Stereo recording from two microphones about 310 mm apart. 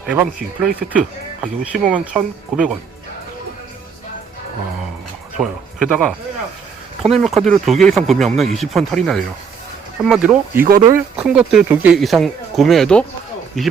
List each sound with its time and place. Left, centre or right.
0.1 s speech: centre
5.4 s speech: centre